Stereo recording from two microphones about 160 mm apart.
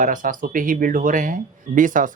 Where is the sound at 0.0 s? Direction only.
55° right (ahead or behind).